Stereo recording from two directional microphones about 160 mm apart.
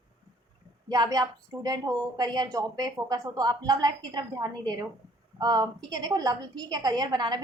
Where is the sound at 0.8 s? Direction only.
25° right (ahead or behind).